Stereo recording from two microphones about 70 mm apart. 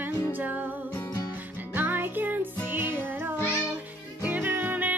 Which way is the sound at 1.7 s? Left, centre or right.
Right.